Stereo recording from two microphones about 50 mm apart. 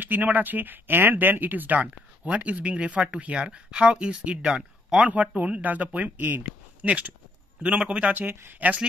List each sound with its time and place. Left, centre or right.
0.0 s speech: right; by 5.0 s centre
5.0 s speech: right
7.6 s speech: right
8.1 s speech: right